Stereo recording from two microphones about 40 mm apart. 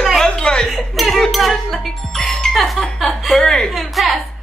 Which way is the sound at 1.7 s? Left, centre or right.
Centre.